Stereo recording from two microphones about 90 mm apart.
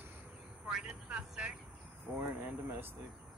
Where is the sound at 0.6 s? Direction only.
10° right (ahead or behind).